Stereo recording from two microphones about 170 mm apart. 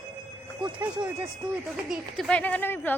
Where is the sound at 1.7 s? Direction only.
Centre (ahead or behind).